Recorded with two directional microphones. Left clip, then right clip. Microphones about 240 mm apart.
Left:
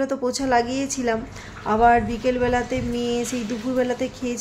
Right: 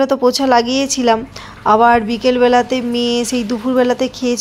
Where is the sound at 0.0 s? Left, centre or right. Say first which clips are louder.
Right 11 dB; centre.